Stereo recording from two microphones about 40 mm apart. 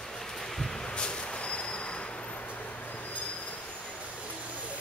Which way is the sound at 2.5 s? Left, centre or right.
Left.